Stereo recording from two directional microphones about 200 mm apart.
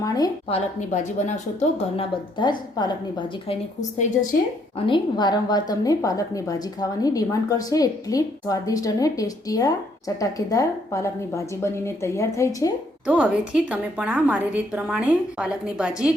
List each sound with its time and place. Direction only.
0.0 s a woman's voice: 20° left (ahead or behind)
0.4 s a woman's voice: 35° left (ahead or behind)
2.4 s a woman's voice: 20° left (ahead or behind)
3.9 s a woman's voice: 35° left (ahead or behind)
4.9 s a woman's voice: 20° left (ahead or behind)
13.1 s a woman's voice: 5° right (ahead or behind)